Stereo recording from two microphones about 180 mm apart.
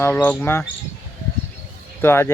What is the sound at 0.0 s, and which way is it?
Speech, 10° left (ahead or behind).